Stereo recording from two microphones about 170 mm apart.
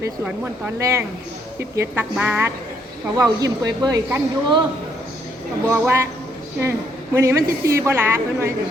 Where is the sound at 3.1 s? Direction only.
20° right (ahead or behind).